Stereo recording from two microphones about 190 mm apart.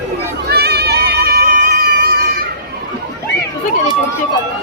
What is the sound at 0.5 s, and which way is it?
Run, 60° right (ahead or behind).